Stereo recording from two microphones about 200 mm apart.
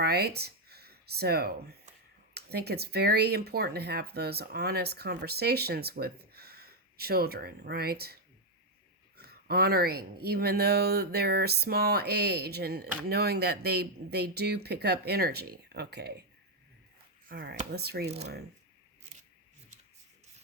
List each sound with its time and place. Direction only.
0.0 s speech: 55° right (ahead or behind)
17.2 s speech: 50° right (ahead or behind)